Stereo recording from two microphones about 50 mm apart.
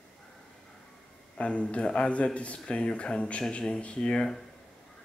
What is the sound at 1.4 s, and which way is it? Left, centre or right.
Speech, left.